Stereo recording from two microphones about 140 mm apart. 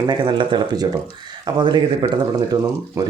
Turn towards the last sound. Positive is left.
turn(degrees=-25)  # may be behind; listen again after turning